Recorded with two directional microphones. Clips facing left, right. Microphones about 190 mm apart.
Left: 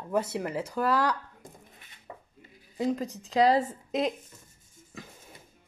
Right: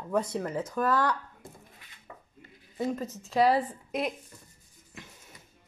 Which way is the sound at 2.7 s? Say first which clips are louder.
Left 2 dB; 15° left (ahead or behind).